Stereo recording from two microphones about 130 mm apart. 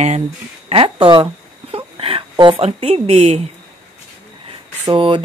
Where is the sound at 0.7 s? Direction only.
40° right (ahead or behind).